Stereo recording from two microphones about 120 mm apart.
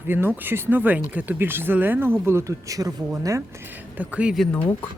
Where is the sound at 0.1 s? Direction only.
15° right (ahead or behind).